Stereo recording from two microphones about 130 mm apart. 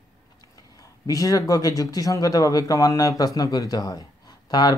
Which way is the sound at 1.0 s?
25° left (ahead or behind).